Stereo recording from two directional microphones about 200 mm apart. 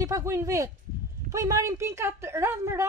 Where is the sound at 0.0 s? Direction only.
15° right (ahead or behind).